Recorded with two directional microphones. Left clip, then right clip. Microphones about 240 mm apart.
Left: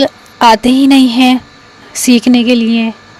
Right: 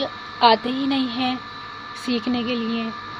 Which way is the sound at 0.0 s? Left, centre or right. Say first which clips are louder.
Left 9 dB; left.